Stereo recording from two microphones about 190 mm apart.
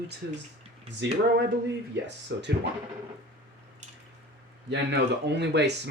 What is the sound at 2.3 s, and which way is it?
Speech, 65° right (ahead or behind).